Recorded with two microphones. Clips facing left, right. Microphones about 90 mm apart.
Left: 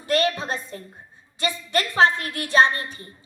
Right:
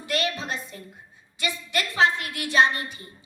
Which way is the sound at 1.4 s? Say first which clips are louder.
Left 4 dB; 35° left (ahead or behind).